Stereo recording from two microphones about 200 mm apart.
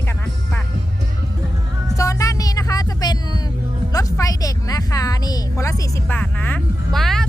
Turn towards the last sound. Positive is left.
turn(degrees=0)  # may be behind; listen again after turning